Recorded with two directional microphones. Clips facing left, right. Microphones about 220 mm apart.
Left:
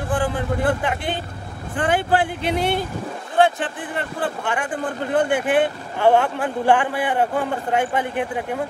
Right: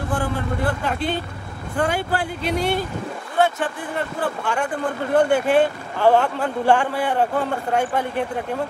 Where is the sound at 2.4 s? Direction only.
60° left (ahead or behind).